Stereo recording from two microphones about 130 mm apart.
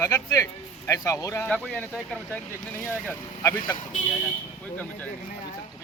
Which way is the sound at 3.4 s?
25° left (ahead or behind).